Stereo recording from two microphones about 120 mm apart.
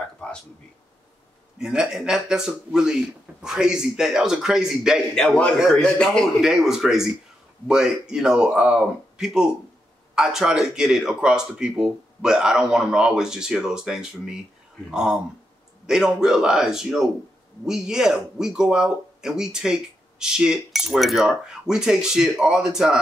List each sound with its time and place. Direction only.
1.6 s speech: 5° right (ahead or behind)